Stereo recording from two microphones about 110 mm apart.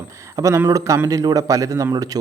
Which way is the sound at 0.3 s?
25° right (ahead or behind).